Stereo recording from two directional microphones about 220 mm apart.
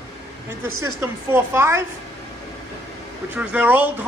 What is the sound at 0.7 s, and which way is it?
Speech, 75° right (ahead or behind).